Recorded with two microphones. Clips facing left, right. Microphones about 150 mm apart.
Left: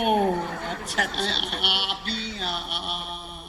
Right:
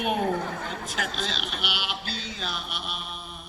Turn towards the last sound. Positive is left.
turn(degrees=50)  # may be behind; listen again after turning